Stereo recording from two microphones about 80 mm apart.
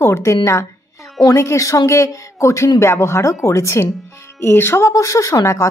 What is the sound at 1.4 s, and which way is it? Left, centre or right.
A woman's voice, left.